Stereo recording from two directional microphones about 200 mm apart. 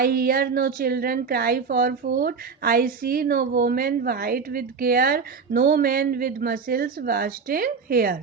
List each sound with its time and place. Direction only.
0.0 s a woman's voice: 50° right (ahead or behind)